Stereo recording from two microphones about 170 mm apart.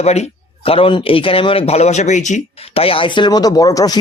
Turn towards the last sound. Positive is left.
turn(degrees=20)  # may be behind; listen again after turning